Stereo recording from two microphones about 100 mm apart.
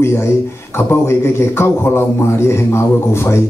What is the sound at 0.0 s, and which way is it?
A man's voice, 25° left (ahead or behind).